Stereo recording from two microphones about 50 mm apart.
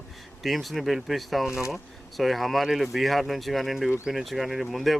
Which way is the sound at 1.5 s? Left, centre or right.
Left.